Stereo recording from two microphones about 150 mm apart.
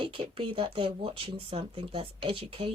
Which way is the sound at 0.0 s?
35° right (ahead or behind).